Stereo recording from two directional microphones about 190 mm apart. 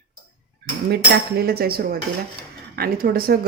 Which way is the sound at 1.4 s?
55° right (ahead or behind).